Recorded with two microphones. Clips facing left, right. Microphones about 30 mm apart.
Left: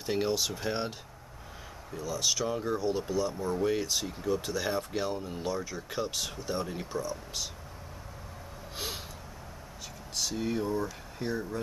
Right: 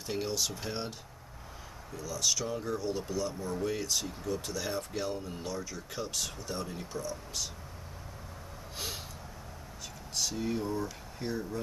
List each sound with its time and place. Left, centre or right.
0.0 s speech: centre
2.0 s speech: centre
8.7 s gasp: centre
10.1 s speech: centre